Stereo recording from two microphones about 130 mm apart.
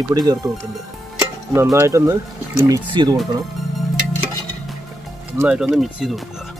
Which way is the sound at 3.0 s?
35° right (ahead or behind).